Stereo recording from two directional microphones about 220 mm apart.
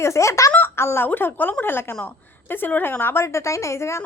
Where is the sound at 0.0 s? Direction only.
15° left (ahead or behind).